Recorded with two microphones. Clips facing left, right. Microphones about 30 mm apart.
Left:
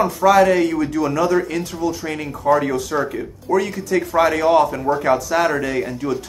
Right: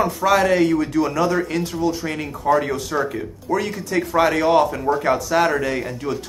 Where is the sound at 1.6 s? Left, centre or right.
Right.